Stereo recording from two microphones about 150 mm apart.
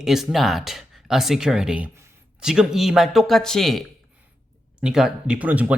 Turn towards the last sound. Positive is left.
turn(degrees=-10)  # may be behind; listen again after turning